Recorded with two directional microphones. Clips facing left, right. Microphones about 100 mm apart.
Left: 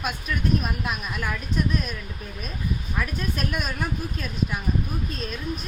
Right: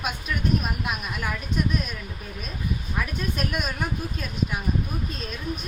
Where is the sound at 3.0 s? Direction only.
5° right (ahead or behind).